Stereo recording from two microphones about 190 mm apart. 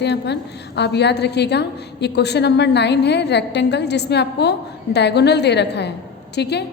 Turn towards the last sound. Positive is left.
turn(degrees=60)  # may be behind; listen again after turning